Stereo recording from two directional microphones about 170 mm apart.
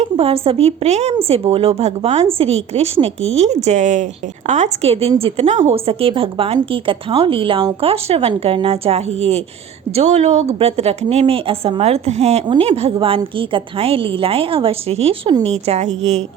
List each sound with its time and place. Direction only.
0.0 s a woman's voice: 35° right (ahead or behind)